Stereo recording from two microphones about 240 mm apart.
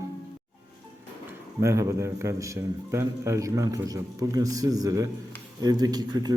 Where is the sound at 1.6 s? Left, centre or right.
Centre.